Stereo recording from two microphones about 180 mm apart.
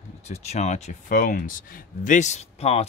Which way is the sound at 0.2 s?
35° left (ahead or behind).